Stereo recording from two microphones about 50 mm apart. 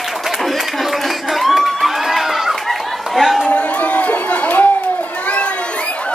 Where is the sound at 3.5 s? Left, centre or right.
Left.